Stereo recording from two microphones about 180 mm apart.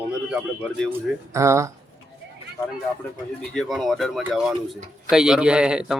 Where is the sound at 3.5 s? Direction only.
Centre (ahead or behind).